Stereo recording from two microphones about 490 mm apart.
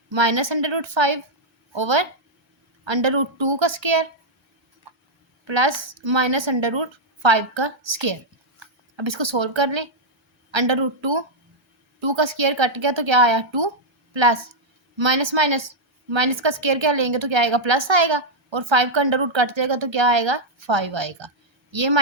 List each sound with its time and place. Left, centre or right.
0.1 s a woman's voice: right
5.5 s a woman's voice: right